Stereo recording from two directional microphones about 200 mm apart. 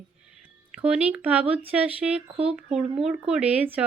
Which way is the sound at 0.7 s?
5° right (ahead or behind).